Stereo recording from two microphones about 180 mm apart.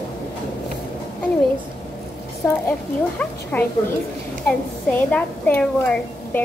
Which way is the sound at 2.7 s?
10° left (ahead or behind).